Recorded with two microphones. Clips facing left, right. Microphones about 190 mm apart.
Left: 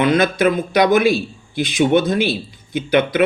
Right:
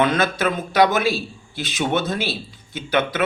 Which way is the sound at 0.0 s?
15° left (ahead or behind).